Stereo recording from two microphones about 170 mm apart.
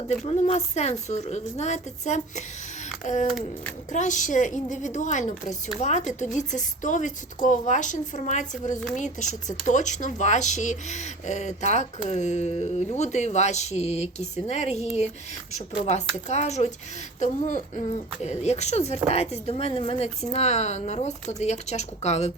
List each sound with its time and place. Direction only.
0.3 s speech: 40° left (ahead or behind)